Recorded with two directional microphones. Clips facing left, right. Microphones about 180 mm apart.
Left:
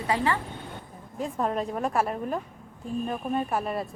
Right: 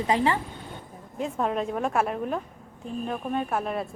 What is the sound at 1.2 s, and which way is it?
Speech, centre (ahead or behind).